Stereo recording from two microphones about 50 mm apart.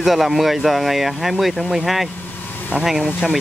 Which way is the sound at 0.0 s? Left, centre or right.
Centre.